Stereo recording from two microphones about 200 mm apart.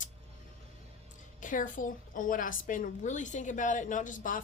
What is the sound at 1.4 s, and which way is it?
A woman's voice, 40° left (ahead or behind).